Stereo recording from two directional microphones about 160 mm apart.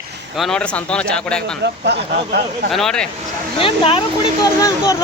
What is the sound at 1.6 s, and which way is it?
Speech, 90° right.